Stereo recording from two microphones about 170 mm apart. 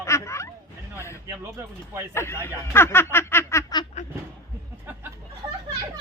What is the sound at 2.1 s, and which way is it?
Snicker, 15° left (ahead or behind).